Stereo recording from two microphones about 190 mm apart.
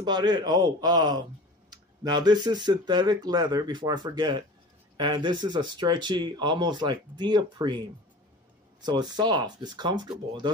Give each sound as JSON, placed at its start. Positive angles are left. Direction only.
{"t": 0.0, "sound": "speech", "side_deg": -20}
{"t": 8.8, "sound": "speech", "side_deg": -20}